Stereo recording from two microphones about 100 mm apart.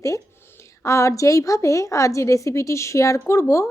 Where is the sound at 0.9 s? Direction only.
30° left (ahead or behind).